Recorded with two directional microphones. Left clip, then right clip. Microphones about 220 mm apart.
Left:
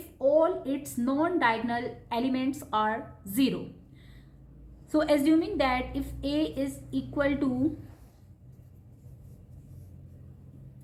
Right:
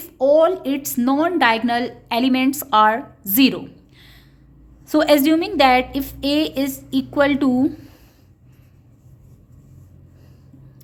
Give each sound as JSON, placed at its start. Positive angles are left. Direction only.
{"t": 0.2, "sound": "a woman's voice", "side_deg": -50}